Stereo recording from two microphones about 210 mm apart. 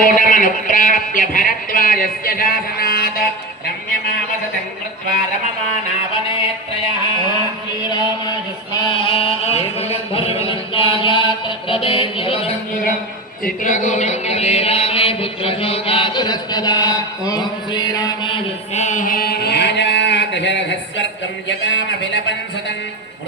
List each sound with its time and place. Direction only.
0.0 s speech: 40° left (ahead or behind)
9.0 s a sound: 25° left (ahead or behind)
13.4 s chant: 35° left (ahead or behind); by 22.4 s 60° left (ahead or behind)